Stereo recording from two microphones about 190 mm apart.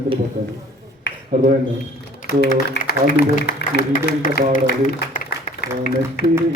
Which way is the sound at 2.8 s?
55° left (ahead or behind).